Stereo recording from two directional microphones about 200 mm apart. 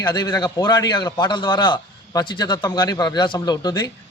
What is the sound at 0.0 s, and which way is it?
A man's voice, 20° left (ahead or behind).